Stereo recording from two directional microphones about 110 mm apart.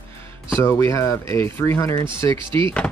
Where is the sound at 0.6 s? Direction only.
25° left (ahead or behind).